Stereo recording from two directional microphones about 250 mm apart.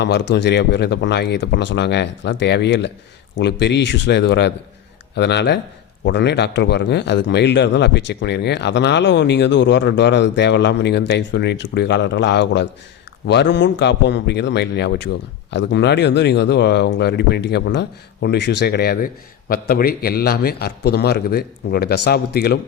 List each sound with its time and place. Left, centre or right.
0.0 s a man's voice: left